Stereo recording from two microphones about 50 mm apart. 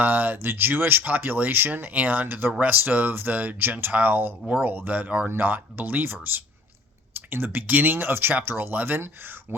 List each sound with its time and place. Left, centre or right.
0.0 s speech: right
5.0 s speech: right
5.4 s speech: right